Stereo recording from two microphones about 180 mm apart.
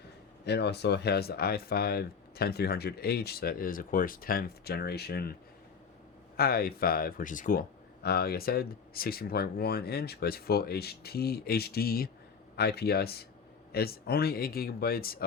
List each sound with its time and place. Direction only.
0.4 s speech: 70° left (ahead or behind)
6.3 s speech: 55° left (ahead or behind)
8.0 s speech: 60° left (ahead or behind)